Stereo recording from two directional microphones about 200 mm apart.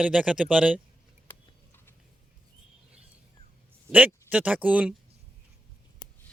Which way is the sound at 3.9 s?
5° right (ahead or behind).